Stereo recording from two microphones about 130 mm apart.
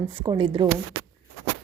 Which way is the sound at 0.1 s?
40° right (ahead or behind).